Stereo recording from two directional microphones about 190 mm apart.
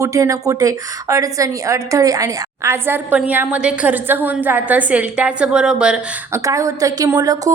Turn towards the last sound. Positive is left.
turn(degrees=-20)  # may be behind; listen again after turning